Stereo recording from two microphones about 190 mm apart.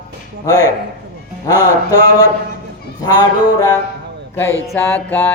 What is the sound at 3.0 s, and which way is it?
Music, 20° left (ahead or behind).